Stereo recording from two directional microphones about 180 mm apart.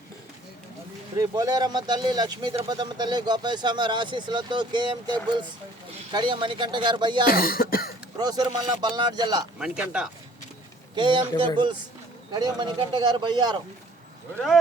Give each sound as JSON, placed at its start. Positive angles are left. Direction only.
{"t": 1.1, "sound": "speech", "side_deg": -20}
{"t": 7.3, "sound": "speech", "side_deg": 55}
{"t": 8.2, "sound": "speech", "side_deg": -20}
{"t": 9.6, "sound": "speech", "side_deg": -5}
{"t": 10.9, "sound": "speech", "side_deg": -25}
{"t": 14.3, "sound": "speech", "side_deg": 0}